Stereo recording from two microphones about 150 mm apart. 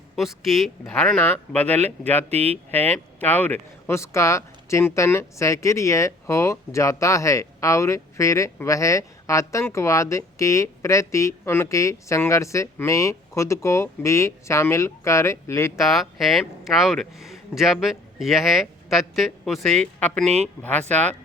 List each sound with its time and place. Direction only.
0.2 s speech: centre (ahead or behind)
2.3 s speech: 45° right (ahead or behind)
2.6 s speech: 10° left (ahead or behind)
15.8 s speech: centre (ahead or behind)